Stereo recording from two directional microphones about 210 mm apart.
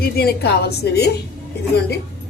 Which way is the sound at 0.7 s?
50° left (ahead or behind).